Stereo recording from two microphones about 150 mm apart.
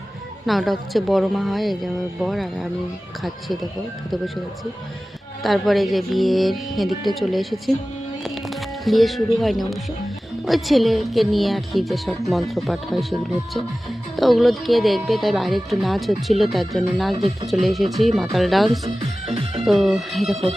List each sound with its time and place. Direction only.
0.4 s speech: centre (ahead or behind)
5.4 s speech: centre (ahead or behind)
8.2 s music: centre (ahead or behind)
10.4 s speech: centre (ahead or behind)
17.2 s speech: 30° right (ahead or behind)
17.5 s speech: centre (ahead or behind)
18.9 s music: 40° right (ahead or behind)
19.6 s speech: centre (ahead or behind)